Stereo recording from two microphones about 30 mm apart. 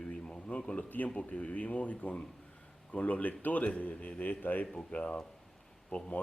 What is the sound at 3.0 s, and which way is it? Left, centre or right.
A man's voice, left.